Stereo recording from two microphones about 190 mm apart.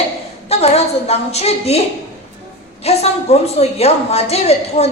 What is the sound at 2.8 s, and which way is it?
A woman's voice, 35° left (ahead or behind).